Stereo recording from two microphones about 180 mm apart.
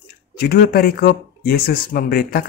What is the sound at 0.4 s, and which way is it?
Speech, 55° left (ahead or behind).